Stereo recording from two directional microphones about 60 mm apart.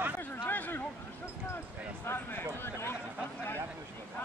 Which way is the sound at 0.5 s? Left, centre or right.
Left.